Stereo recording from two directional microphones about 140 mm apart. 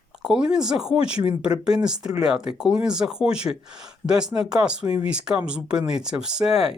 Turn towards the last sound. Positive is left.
turn(degrees=-5)  # may be behind; listen again after turning